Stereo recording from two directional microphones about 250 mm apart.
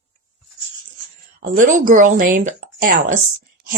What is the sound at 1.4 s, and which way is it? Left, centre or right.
A woman's voice, right.